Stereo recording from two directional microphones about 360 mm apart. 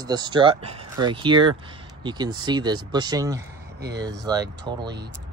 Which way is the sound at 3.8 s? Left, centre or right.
Right.